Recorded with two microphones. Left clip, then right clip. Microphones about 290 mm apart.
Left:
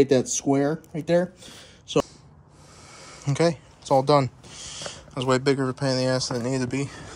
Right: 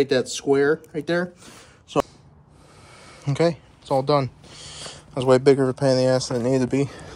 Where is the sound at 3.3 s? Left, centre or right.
Centre.